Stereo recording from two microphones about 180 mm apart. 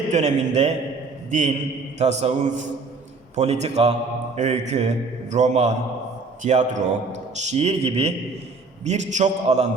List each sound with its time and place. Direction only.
0.1 s a man's voice: 40° right (ahead or behind)